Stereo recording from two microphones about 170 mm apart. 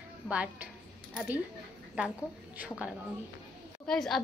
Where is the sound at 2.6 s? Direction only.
10° right (ahead or behind).